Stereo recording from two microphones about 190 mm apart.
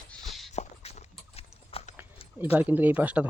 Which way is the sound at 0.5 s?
35° left (ahead or behind).